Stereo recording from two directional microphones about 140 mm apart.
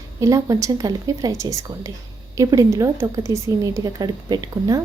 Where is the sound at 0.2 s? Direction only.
25° right (ahead or behind).